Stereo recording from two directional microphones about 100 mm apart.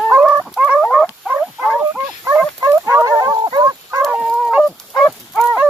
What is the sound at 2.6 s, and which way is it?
Fowl, 30° right (ahead or behind).